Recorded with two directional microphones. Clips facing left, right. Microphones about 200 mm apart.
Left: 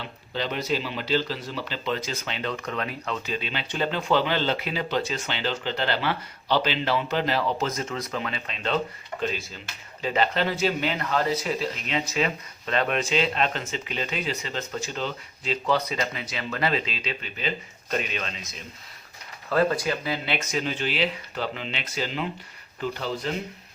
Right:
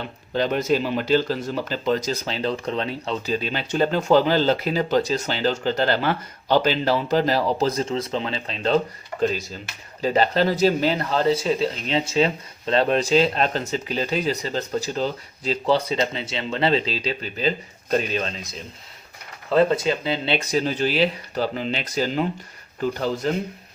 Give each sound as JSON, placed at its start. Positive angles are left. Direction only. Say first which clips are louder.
{"t": 0.0, "sound": "speech", "louder": "right 7 dB", "side_deg": -45}
{"t": 19.5, "sound": "speech", "louder": "right 5 dB", "side_deg": -25}